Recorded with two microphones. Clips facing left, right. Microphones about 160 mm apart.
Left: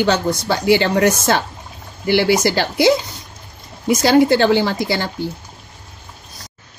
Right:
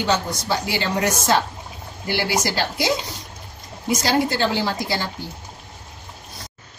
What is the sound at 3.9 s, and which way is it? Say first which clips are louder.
Speech: left 8 dB; 65° left (ahead or behind).